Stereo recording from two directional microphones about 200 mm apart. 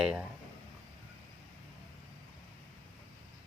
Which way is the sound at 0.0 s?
5° right (ahead or behind).